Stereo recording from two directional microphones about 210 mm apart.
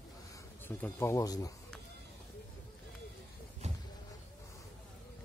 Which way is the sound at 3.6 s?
30° right (ahead or behind).